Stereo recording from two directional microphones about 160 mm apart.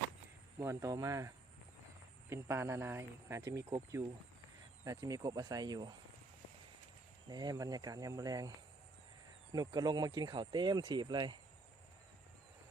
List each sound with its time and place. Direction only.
0.6 s speech: 20° right (ahead or behind)
2.3 s speech: 15° right (ahead or behind)
4.9 s speech: 20° right (ahead or behind)
7.3 s speech: 25° right (ahead or behind)